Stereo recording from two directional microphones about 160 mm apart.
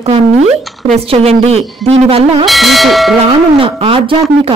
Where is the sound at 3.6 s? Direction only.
35° right (ahead or behind).